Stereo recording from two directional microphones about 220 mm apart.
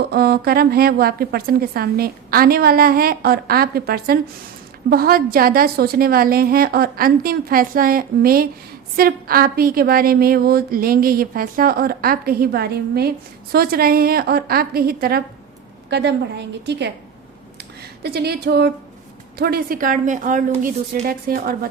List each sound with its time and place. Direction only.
0.0 s a woman's voice: 45° right (ahead or behind)
18.0 s a woman's voice: 45° right (ahead or behind)